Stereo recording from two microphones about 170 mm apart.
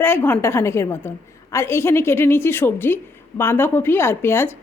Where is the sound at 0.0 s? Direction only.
15° left (ahead or behind).